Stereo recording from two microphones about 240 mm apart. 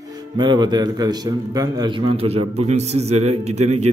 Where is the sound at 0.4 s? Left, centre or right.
Centre.